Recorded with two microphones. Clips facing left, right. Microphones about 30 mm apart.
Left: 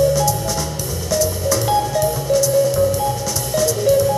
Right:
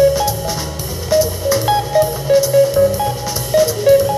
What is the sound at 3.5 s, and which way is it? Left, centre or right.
Music, right.